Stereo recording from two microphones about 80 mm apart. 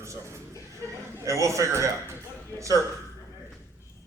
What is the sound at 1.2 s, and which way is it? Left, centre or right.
Speech, right.